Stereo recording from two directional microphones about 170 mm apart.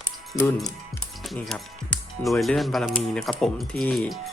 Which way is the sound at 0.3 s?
20° left (ahead or behind).